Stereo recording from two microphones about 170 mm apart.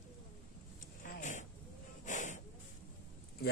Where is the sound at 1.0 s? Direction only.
50° left (ahead or behind).